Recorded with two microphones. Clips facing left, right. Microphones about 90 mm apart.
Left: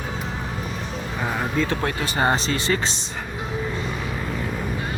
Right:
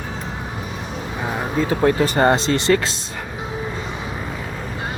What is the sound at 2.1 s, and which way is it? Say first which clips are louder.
Speech: right 5 dB; 50° right (ahead or behind).